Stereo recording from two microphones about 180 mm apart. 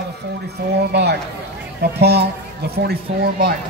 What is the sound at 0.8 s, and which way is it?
Speech, 65° right (ahead or behind).